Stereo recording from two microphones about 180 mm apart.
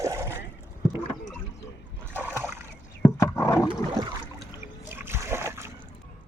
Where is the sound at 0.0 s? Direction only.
15° right (ahead or behind).